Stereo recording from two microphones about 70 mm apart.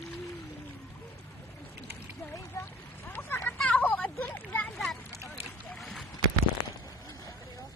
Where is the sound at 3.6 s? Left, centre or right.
Centre.